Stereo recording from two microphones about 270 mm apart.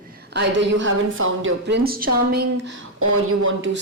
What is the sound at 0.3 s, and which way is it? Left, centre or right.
Speech, right.